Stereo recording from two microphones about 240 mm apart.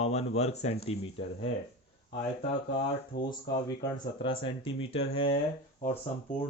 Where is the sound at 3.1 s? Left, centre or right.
Left.